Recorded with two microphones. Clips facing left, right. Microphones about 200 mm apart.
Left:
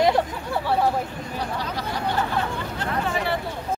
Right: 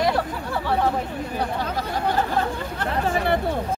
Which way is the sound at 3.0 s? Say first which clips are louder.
Right 6 dB; 50° right (ahead or behind).